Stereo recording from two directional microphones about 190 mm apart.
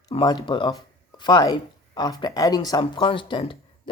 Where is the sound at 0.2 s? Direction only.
20° left (ahead or behind).